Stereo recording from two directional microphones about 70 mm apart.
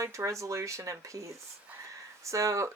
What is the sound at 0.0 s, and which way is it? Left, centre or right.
Speech, right.